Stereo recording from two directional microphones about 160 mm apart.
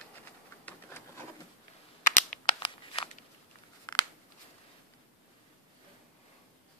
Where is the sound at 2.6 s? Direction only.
35° left (ahead or behind).